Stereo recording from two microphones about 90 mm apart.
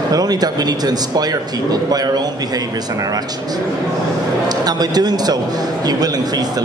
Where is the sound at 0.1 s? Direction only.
45° right (ahead or behind).